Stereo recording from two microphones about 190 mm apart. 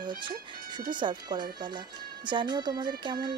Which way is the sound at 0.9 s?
25° right (ahead or behind).